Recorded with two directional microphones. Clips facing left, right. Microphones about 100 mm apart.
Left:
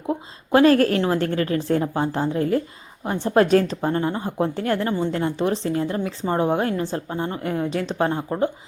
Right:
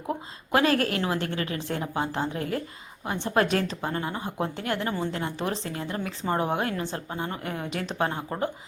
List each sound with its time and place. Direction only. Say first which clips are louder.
0.5 s a woman's voice: left 8 dB; 40° left (ahead or behind)